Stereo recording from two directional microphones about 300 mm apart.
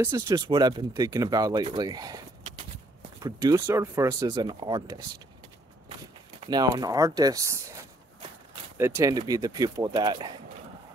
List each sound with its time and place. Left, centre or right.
0.0 s speech: centre
6.4 s speech: centre